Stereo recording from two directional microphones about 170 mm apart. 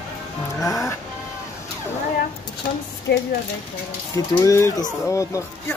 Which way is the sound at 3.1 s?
70° left (ahead or behind).